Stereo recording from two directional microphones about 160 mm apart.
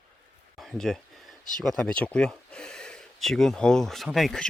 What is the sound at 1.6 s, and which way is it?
Speech, 5° left (ahead or behind).